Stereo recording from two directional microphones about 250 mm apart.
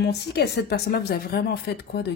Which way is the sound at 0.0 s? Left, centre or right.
Left.